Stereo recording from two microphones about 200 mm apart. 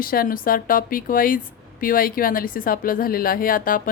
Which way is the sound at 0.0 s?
45° left (ahead or behind).